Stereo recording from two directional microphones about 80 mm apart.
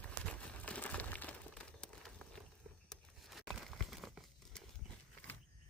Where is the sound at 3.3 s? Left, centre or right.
Centre.